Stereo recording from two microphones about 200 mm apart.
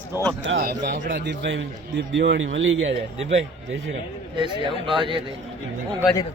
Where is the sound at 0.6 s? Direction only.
55° right (ahead or behind).